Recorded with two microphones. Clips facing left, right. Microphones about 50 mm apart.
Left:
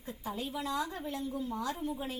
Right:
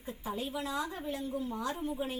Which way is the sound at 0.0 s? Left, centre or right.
Centre.